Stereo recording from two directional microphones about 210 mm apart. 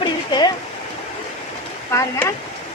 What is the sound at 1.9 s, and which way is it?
Speech, 15° left (ahead or behind).